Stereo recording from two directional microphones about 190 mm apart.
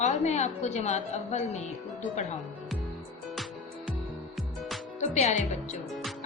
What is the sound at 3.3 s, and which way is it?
Music, centre (ahead or behind).